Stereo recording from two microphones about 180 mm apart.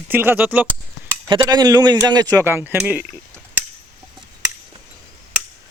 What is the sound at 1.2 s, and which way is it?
Speech, 25° right (ahead or behind).